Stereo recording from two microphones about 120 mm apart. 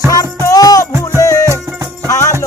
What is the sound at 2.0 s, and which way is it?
Music, 25° left (ahead or behind).